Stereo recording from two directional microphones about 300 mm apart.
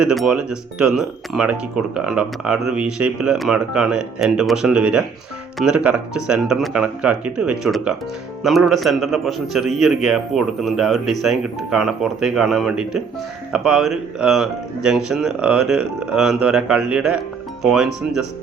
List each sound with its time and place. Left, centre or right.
0.0 s speech: centre